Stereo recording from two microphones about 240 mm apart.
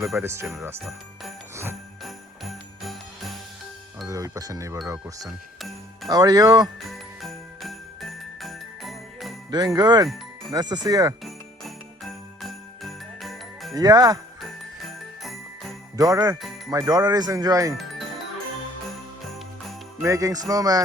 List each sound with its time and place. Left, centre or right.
0.0 s jingle bell: centre
4.0 s speech: centre
5.5 s music: centre
6.1 s speech: centre
7.2 s jingle bell: centre
9.7 s speech: centre
11.2 s jingle bell: centre
13.7 s speech: centre
14.4 s jingle bell: centre
16.0 s speech: centre
20.0 s speech: centre